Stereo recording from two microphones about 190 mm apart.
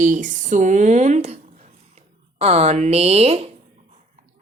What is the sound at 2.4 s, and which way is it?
Speech, 35° right (ahead or behind).